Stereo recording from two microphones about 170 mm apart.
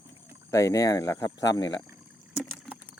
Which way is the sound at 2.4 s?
10° right (ahead or behind).